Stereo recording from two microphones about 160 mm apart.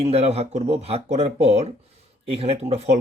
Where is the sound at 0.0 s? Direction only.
40° right (ahead or behind).